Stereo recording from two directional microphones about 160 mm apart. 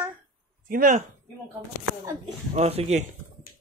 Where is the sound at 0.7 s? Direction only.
60° right (ahead or behind).